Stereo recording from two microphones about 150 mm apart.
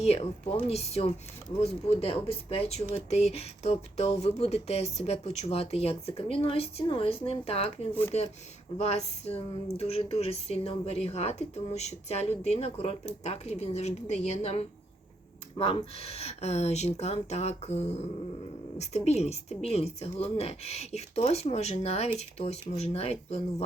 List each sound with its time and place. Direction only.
0.0 s speech: 45° left (ahead or behind)